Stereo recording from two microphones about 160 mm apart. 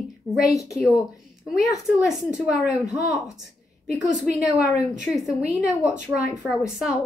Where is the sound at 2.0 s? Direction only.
5° right (ahead or behind).